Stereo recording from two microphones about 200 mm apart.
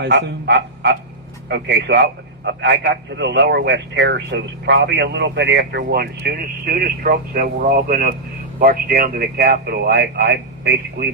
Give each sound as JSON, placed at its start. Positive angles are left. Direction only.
{"t": 0.0, "sound": "a man's voice", "side_deg": -60}